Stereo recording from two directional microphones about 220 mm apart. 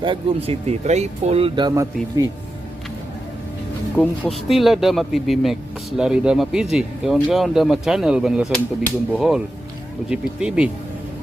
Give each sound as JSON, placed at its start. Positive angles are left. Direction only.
{"t": 0.0, "sound": "speech", "side_deg": -25}
{"t": 4.2, "sound": "speech", "side_deg": 0}